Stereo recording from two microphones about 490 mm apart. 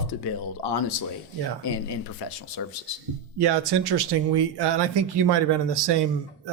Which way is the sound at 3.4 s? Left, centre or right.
Right.